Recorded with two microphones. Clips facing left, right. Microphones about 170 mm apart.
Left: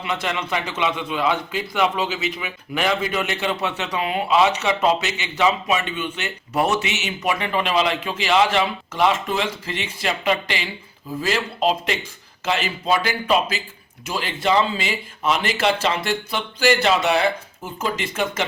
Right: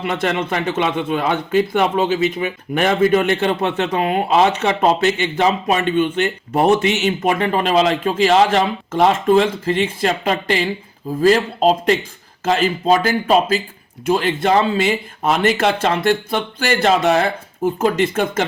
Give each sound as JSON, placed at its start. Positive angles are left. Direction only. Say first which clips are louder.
{"t": 0.0, "sound": "a man's voice", "louder": "right 6 dB", "side_deg": -50}